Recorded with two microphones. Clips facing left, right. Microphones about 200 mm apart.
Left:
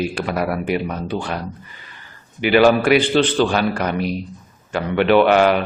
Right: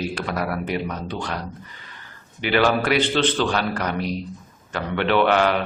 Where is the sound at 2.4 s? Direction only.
10° left (ahead or behind).